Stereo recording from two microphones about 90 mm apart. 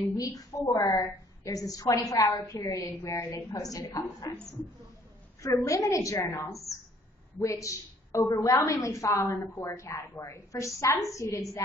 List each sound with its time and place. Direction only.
0.2 s a woman's voice: 40° left (ahead or behind)